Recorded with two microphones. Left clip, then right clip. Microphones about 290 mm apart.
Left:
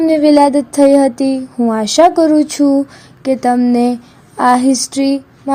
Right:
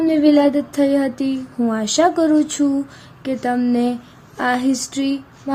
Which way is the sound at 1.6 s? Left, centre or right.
Centre.